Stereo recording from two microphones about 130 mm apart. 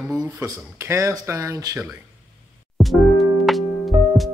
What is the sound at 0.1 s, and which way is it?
Speech, 25° right (ahead or behind).